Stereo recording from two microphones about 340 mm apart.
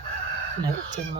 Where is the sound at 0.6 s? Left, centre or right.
Right.